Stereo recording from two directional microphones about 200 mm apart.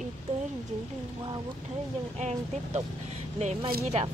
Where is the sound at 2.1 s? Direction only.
35° right (ahead or behind).